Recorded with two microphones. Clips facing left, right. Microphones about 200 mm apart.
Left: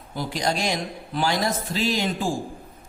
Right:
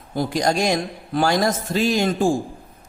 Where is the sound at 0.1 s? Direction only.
45° right (ahead or behind).